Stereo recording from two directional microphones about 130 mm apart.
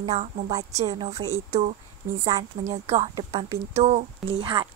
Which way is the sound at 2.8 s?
55° right (ahead or behind).